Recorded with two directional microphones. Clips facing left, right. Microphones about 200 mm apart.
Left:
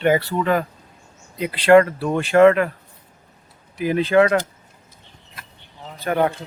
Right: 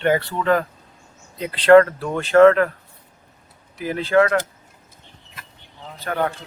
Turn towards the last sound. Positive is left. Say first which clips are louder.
# left 4 dB
turn(degrees=15)  # may be behind; listen again after turning